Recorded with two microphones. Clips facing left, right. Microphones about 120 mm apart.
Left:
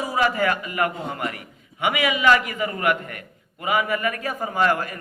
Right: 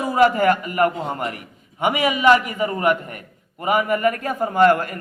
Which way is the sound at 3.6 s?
40° right (ahead or behind).